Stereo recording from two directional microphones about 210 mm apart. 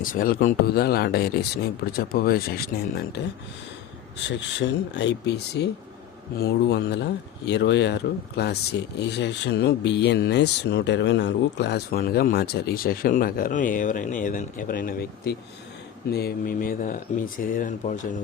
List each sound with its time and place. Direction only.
0.0 s speech: 40° left (ahead or behind)
4.3 s speech: 60° left (ahead or behind); by 18.2 s 35° left (ahead or behind)